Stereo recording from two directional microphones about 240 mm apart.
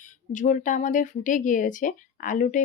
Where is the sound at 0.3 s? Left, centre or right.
Left.